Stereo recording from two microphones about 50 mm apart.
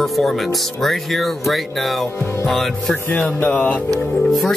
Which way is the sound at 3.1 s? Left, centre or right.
Left.